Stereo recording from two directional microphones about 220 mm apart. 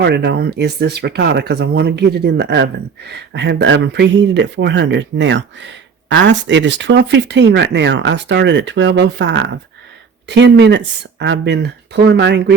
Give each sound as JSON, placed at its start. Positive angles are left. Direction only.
{"t": 0.0, "sound": "speech", "side_deg": -50}